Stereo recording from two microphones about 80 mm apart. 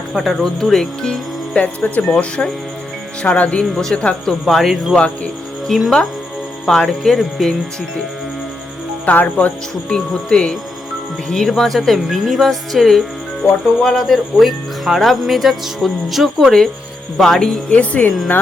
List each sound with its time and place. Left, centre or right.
0.1 s speech: centre
1.6 s speech: left; by 4.9 s centre
4.9 s speech: centre
5.6 s speech: centre
9.0 s speech: centre
17.7 s speech: centre